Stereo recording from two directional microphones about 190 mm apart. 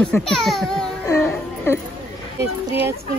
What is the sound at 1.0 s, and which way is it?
Speech, 15° left (ahead or behind).